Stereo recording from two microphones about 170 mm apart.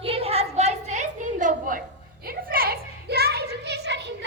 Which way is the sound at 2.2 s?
60° right (ahead or behind).